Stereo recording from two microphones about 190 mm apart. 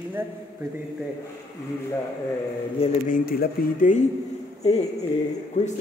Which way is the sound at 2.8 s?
30° left (ahead or behind).